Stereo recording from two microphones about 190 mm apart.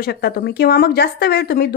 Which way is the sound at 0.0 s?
55° left (ahead or behind).